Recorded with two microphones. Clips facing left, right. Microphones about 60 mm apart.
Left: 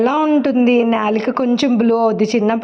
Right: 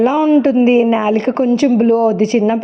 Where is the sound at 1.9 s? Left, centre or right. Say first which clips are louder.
Right 2 dB; left.